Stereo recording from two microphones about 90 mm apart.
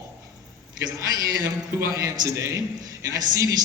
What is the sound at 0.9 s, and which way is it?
A man's voice, 40° right (ahead or behind).